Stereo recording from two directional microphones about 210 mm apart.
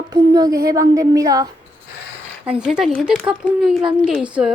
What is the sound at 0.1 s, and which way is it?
A woman's voice, 20° right (ahead or behind).